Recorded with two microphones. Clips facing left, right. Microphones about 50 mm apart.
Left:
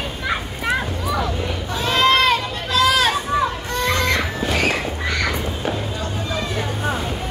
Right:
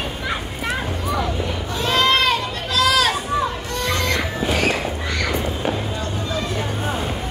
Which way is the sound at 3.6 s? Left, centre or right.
Left.